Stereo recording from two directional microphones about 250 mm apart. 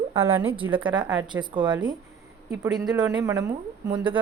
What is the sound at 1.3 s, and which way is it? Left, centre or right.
A woman's voice, centre.